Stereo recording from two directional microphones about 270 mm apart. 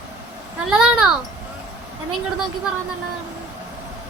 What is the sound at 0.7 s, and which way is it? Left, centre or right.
Speech, centre.